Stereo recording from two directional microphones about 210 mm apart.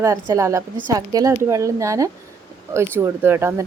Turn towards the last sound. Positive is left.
turn(degrees=-10)  # may be behind; listen again after turning